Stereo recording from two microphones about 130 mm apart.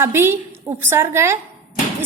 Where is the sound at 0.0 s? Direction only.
20° right (ahead or behind).